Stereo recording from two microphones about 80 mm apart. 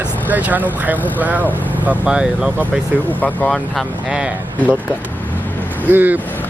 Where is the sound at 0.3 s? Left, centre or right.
Right.